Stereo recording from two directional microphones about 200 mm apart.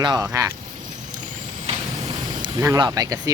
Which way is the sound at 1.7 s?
30° right (ahead or behind).